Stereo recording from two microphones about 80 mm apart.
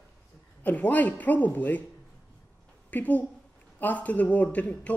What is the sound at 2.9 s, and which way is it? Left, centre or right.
A woman's voice, left.